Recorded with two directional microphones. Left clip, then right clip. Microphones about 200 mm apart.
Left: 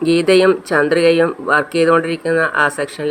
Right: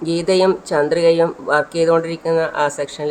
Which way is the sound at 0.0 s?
15° left (ahead or behind).